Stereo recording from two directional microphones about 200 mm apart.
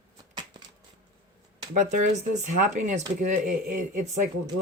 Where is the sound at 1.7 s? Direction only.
40° right (ahead or behind).